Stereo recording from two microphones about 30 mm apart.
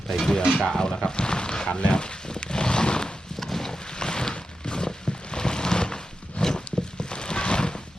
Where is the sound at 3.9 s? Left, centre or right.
Left.